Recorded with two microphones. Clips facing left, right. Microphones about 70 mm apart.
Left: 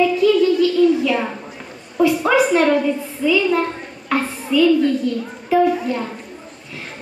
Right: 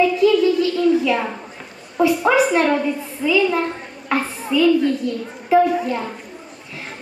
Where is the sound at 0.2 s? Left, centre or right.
Centre.